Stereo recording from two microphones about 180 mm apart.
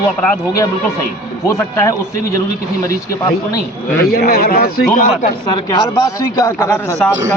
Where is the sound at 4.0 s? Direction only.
60° left (ahead or behind).